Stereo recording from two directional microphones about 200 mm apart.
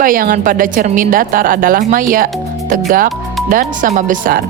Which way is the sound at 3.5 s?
45° right (ahead or behind).